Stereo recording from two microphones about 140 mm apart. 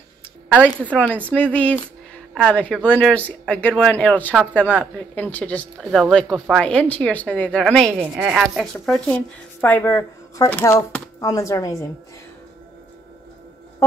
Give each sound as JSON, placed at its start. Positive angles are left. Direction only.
{"t": 0.5, "sound": "speech", "side_deg": 10}
{"t": 5.8, "sound": "speech", "side_deg": 0}
{"t": 7.9, "sound": "speech", "side_deg": -10}
{"t": 9.1, "sound": "a woman's voice", "side_deg": 10}